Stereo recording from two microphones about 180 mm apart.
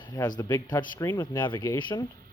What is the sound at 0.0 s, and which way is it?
Speech, 20° left (ahead or behind).